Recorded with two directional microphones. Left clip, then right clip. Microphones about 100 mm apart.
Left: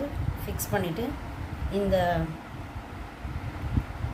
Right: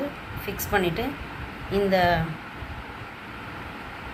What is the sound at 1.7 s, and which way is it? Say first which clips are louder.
Speech: right 4 dB; 30° right (ahead or behind).